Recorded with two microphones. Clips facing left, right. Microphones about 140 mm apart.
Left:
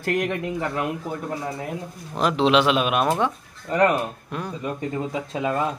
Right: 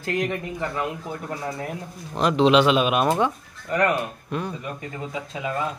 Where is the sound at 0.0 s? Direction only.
60° left (ahead or behind).